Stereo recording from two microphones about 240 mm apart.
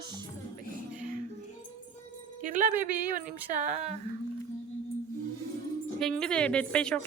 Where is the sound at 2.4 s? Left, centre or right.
Right.